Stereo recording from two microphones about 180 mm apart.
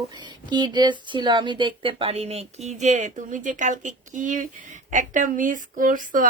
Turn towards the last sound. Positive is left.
turn(degrees=-50)  # may be behind; listen again after turning